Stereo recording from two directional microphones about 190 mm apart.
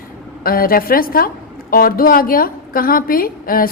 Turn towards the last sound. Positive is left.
turn(degrees=50)  # may be behind; listen again after turning